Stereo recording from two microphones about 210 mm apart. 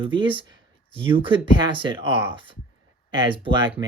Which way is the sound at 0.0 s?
25° right (ahead or behind).